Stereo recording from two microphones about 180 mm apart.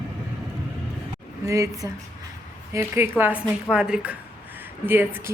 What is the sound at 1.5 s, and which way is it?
Speech, 15° right (ahead or behind).